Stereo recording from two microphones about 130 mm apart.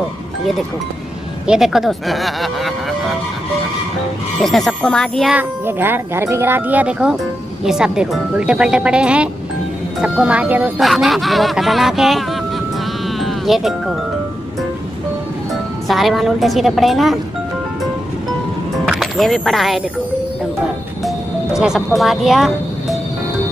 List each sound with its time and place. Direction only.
1.5 s speech: centre (ahead or behind)
4.4 s speech: centre (ahead or behind)
5.3 s speech: 15° right (ahead or behind)
10.8 s speech: centre (ahead or behind)
13.2 s speech: centre (ahead or behind)
15.9 s speech: centre (ahead or behind)
18.9 s speech: centre (ahead or behind)
21.5 s speech: 5° right (ahead or behind)